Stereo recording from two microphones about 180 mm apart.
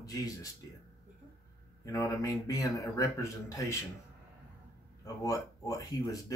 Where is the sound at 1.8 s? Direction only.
15° left (ahead or behind).